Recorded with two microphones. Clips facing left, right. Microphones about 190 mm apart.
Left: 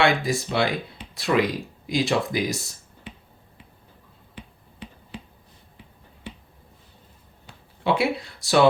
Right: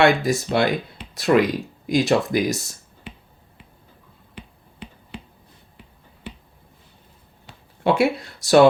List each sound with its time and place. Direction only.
0.0 s speech: 45° right (ahead or behind)
7.9 s speech: 45° right (ahead or behind)